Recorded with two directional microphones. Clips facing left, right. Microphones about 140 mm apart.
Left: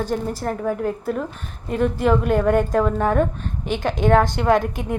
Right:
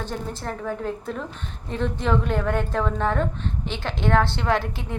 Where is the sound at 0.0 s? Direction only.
10° left (ahead or behind).